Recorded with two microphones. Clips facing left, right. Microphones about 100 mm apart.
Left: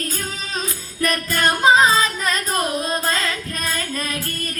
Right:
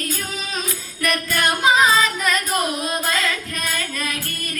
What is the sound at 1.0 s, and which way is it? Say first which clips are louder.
Music: left 1 dB; 30° left (ahead or behind).